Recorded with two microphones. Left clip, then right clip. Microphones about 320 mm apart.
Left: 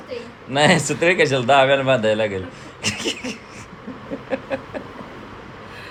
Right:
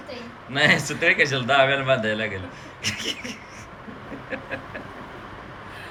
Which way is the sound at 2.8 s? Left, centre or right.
Centre.